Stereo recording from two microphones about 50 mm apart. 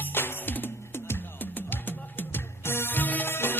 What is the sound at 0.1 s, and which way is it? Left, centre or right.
Music, left.